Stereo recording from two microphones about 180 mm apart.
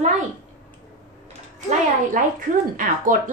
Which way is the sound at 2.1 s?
50° right (ahead or behind).